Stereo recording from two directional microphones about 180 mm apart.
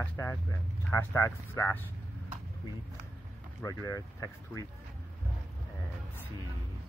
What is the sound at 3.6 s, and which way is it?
Speech, 20° left (ahead or behind).